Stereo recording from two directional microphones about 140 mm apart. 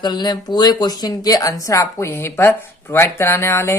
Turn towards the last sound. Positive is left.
turn(degrees=20)  # may be behind; listen again after turning